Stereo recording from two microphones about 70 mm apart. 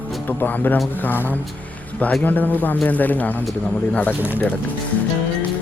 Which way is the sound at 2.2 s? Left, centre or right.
Left.